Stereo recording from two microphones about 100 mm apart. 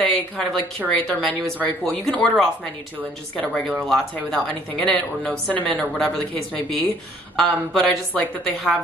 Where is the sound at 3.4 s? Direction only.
10° left (ahead or behind).